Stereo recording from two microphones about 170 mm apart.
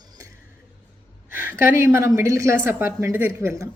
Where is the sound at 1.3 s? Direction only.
15° right (ahead or behind).